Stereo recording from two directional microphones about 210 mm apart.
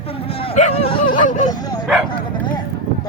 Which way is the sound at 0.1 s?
25° left (ahead or behind).